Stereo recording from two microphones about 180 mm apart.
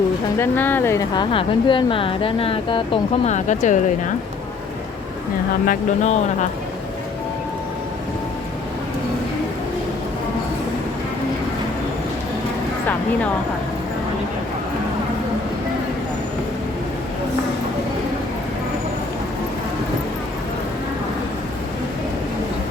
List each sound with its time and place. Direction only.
0.3 s a woman's voice: 10° left (ahead or behind); by 4.1 s 45° left (ahead or behind)
5.6 s speech: 40° left (ahead or behind)